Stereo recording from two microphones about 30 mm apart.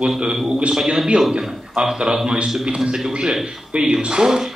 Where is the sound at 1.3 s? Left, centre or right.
Right.